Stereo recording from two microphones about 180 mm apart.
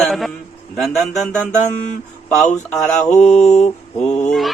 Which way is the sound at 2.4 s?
5° left (ahead or behind).